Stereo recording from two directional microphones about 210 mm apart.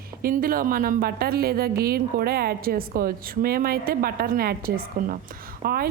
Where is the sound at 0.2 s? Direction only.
45° right (ahead or behind).